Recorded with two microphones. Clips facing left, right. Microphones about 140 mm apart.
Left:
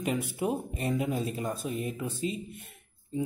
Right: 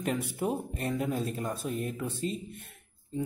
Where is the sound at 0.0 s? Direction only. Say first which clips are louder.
Left 1 dB; 5° left (ahead or behind).